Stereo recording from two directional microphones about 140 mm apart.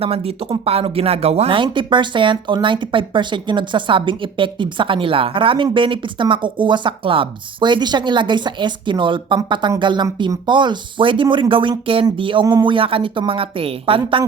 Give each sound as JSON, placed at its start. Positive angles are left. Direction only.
{"t": 0.0, "sound": "speech", "side_deg": -45}